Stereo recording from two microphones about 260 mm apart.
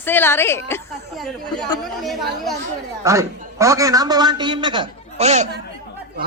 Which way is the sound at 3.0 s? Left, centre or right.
Centre.